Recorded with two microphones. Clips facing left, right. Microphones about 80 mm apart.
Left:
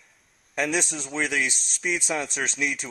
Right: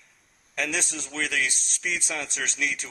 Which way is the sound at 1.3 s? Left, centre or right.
Left.